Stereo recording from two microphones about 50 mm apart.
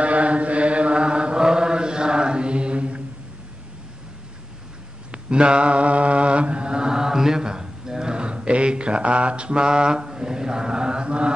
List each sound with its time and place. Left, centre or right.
0.0 s chant: right
5.1 s mantra: centre